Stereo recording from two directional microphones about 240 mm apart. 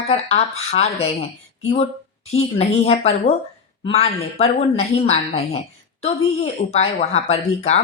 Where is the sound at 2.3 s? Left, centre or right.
Left.